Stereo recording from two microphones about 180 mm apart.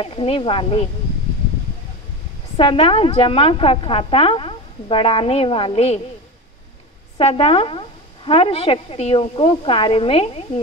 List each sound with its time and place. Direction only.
0.0 s a woman's voice: 30° left (ahead or behind)
2.5 s a woman's voice: 30° left (ahead or behind)
7.2 s a woman's voice: 35° left (ahead or behind)